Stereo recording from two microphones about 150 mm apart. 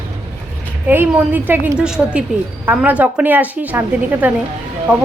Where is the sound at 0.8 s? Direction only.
10° right (ahead or behind).